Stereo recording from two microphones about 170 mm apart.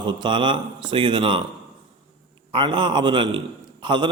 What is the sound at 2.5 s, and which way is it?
A man's voice, 30° right (ahead or behind).